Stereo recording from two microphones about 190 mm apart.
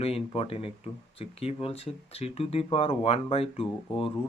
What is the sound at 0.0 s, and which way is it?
Speech, 30° left (ahead or behind).